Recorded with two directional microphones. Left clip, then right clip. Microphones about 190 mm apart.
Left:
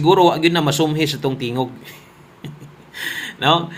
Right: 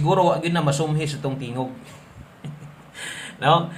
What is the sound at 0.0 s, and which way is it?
Speech, 30° left (ahead or behind).